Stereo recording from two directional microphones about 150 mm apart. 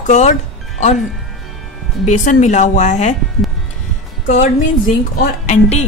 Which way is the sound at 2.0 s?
55° left (ahead or behind).